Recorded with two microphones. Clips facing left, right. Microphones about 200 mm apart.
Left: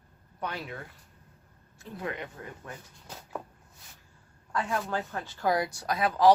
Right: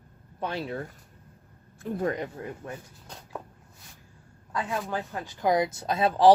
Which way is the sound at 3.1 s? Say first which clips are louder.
Left 1 dB; 5° left (ahead or behind).